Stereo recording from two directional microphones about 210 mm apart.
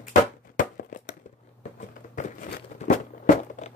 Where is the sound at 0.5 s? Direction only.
40° left (ahead or behind).